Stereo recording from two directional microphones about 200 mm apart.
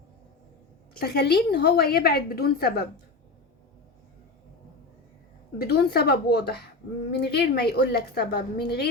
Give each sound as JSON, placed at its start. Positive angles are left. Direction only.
{"t": 0.9, "sound": "a woman's voice", "side_deg": 55}
{"t": 5.5, "sound": "a woman's voice", "side_deg": 50}